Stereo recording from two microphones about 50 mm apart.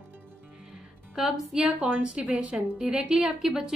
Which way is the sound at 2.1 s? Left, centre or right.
Right.